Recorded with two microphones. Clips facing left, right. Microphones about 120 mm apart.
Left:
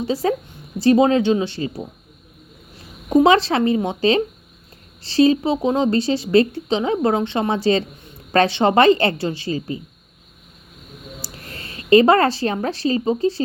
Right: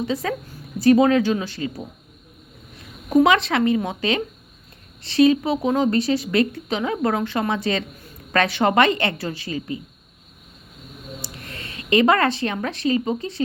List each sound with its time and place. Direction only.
0.0 s a woman's voice: 30° left (ahead or behind)
2.7 s a sound: 30° left (ahead or behind)
3.2 s a woman's voice: 30° left (ahead or behind)
11.3 s speech: 35° left (ahead or behind)